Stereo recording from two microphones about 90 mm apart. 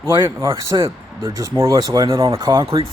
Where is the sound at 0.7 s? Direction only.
70° right (ahead or behind).